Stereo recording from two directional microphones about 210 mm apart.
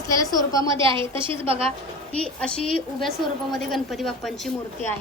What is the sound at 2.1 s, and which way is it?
Speech, 5° left (ahead or behind).